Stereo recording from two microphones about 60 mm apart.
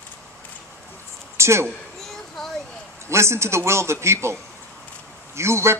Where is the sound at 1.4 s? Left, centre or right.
Right.